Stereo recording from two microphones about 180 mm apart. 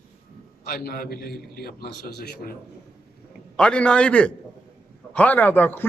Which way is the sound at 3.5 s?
5° left (ahead or behind).